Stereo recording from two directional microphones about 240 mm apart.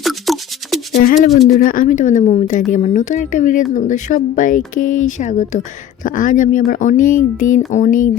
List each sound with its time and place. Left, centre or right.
0.0 s music: centre
0.9 s rattle: left
1.5 s speech: left